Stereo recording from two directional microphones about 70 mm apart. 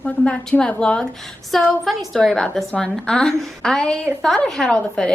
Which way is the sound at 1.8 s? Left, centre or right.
Centre.